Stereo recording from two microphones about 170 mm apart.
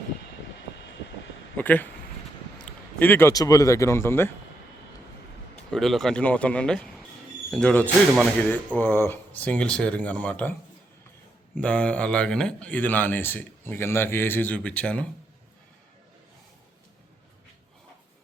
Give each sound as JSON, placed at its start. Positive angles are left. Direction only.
{"t": 1.5, "sound": "speech", "side_deg": 10}
{"t": 5.7, "sound": "speech", "side_deg": 0}
{"t": 11.5, "sound": "speech", "side_deg": 5}